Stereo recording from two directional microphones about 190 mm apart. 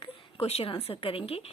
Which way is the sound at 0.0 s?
30° left (ahead or behind).